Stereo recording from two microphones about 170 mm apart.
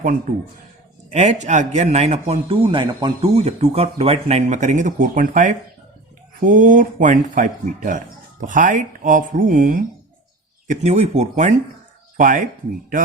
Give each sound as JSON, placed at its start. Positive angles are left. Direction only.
{"t": 0.0, "sound": "a man's voice", "side_deg": -50}
{"t": 3.2, "sound": "speech", "side_deg": -40}
{"t": 10.7, "sound": "a man's voice", "side_deg": -40}